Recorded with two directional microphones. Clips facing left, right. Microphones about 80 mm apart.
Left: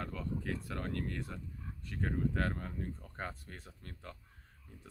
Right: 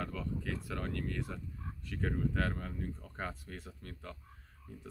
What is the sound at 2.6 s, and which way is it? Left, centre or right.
Speech, left.